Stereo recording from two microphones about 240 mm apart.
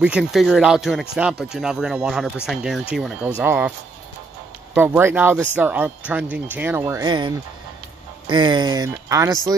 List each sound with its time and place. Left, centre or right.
0.0 s speech: centre
4.7 s speech: centre